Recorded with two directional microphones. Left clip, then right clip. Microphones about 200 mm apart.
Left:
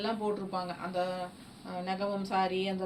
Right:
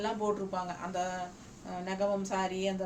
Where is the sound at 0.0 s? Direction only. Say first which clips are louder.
Right 1 dB; 25° right (ahead or behind).